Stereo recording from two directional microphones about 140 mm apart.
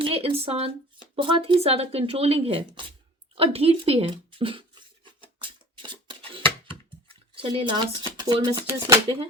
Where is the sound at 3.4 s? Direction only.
45° right (ahead or behind).